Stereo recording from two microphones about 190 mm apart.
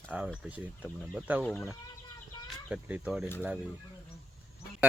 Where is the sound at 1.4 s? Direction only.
5° left (ahead or behind).